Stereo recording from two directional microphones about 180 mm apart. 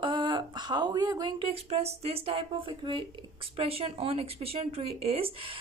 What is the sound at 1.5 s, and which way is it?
Speech, 35° right (ahead or behind).